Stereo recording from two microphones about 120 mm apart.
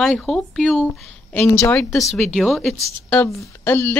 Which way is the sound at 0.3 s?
Centre (ahead or behind).